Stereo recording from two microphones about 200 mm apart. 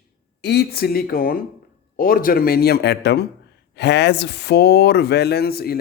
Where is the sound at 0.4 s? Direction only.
55° left (ahead or behind).